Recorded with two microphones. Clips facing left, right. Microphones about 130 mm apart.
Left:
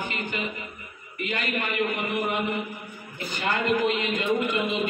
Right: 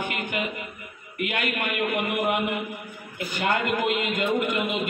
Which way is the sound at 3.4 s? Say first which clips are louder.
Even; 55° right (ahead or behind).